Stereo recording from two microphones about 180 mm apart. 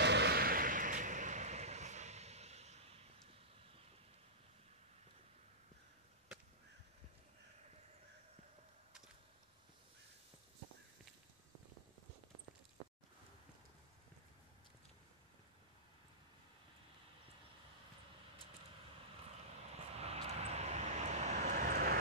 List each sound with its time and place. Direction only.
0.0 s vehicle: 70° right (ahead or behind); by 3.3 s 35° right (ahead or behind)
19.7 s vehicle: 35° right (ahead or behind); by 21.9 s 55° right (ahead or behind)